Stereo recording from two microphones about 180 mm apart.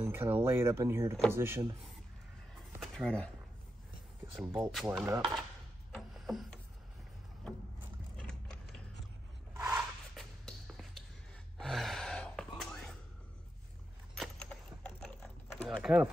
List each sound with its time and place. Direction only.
0.0 s speech: 10° right (ahead or behind)
2.8 s speech: centre (ahead or behind)
4.5 s speech: 5° right (ahead or behind)
4.8 s speech: 15° right (ahead or behind)
5.9 s a sound: centre (ahead or behind)
9.6 s a sound: 10° right (ahead or behind)
10.1 s music: centre (ahead or behind)
11.5 s gasp: centre (ahead or behind)
14.1 s typing: 5° left (ahead or behind)